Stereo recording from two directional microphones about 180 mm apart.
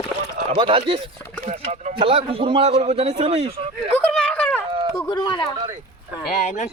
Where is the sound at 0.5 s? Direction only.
30° right (ahead or behind).